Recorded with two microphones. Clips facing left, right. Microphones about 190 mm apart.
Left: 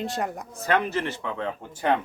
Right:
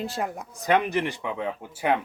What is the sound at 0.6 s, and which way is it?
Speech, 15° right (ahead or behind).